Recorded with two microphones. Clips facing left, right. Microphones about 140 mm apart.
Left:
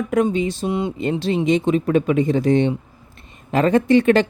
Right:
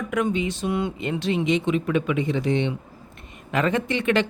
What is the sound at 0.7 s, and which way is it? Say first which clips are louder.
Speech: left 4 dB; 25° left (ahead or behind).